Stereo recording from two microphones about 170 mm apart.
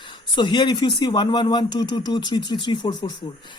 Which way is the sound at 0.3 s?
25° left (ahead or behind).